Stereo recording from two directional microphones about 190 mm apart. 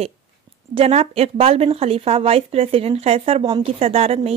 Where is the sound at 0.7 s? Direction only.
35° right (ahead or behind).